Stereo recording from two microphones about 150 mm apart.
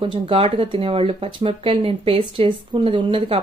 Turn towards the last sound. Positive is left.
turn(degrees=-35)  # may be behind; listen again after turning